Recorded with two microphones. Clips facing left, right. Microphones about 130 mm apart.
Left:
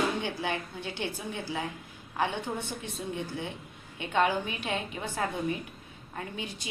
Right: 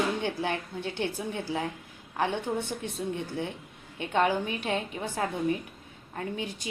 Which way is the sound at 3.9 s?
40° right (ahead or behind).